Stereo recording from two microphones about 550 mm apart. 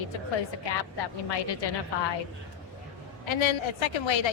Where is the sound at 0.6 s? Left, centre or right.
Left.